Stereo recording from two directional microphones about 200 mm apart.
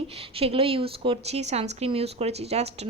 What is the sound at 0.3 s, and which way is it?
A woman's voice, 30° right (ahead or behind).